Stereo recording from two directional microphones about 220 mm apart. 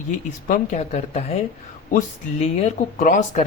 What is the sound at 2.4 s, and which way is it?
Speech, 30° left (ahead or behind).